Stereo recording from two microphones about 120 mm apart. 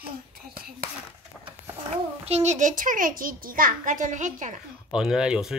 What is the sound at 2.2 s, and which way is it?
A child's voice, 65° right (ahead or behind).